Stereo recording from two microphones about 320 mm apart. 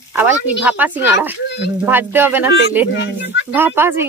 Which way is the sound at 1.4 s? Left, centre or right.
Left.